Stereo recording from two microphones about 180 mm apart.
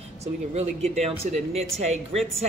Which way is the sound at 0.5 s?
35° right (ahead or behind).